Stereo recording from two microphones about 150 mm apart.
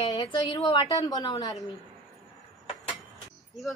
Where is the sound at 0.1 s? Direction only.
25° left (ahead or behind).